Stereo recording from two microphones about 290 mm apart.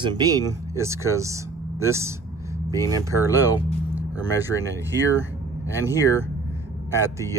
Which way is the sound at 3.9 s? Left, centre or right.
Centre.